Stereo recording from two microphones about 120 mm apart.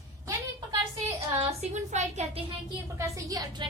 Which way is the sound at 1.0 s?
55° right (ahead or behind).